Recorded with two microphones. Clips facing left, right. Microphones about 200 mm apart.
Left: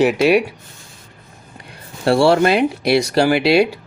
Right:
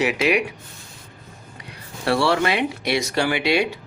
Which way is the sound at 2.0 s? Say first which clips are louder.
Left 7 dB; 30° left (ahead or behind).